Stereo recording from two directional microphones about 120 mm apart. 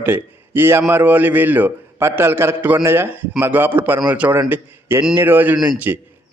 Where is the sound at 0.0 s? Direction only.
15° right (ahead or behind).